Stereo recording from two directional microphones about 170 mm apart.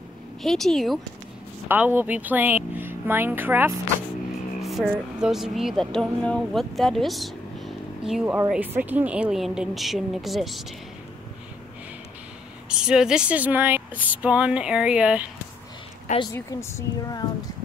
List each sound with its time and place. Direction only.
0.4 s a woman's voice: centre (ahead or behind)
1.7 s speech: 10° right (ahead or behind)
4.6 s a woman's voice: centre (ahead or behind)
12.6 s speech: 5° right (ahead or behind)
16.3 s a woman's voice: 20° left (ahead or behind)